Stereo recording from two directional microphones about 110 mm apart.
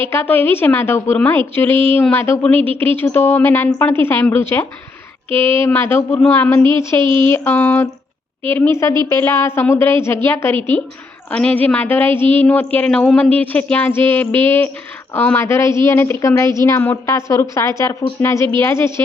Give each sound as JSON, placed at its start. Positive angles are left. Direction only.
{"t": 0.0, "sound": "a woman's voice", "side_deg": 20}
{"t": 7.0, "sound": "speech", "side_deg": -50}
{"t": 7.3, "sound": "a woman's voice", "side_deg": 25}
{"t": 15.4, "sound": "a woman's voice", "side_deg": 25}